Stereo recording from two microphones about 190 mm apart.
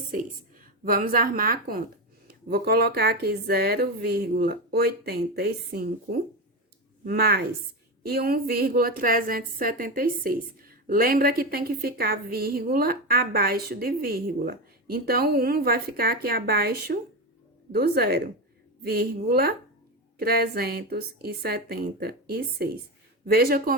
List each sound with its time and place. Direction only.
0.9 s a woman's voice: 45° right (ahead or behind)